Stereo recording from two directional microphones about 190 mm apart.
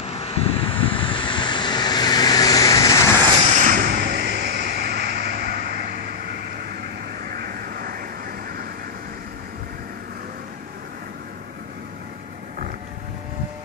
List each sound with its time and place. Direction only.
0.0 s vehicle: 30° left (ahead or behind); by 3.0 s 15° left (ahead or behind)
3.5 s a sound: 40° right (ahead or behind)
7.2 s vehicle: 50° right (ahead or behind)